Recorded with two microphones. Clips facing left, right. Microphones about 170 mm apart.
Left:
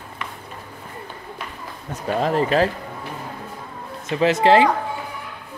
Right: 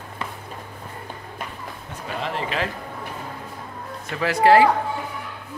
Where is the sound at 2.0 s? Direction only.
40° left (ahead or behind).